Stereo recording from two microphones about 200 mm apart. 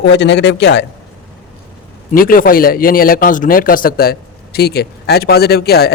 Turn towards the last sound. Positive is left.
turn(degrees=50)  # may be behind; listen again after turning